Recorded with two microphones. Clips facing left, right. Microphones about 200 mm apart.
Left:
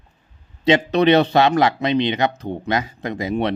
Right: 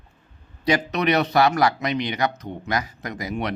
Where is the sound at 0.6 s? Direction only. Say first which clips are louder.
Left 6 dB; 25° left (ahead or behind).